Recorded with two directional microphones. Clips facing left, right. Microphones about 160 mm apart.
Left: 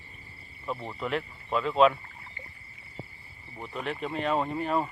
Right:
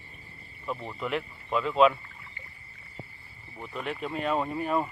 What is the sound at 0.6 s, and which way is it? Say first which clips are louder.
Speech: even; 5° left (ahead or behind).